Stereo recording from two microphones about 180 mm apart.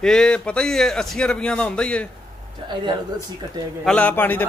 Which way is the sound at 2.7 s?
25° right (ahead or behind).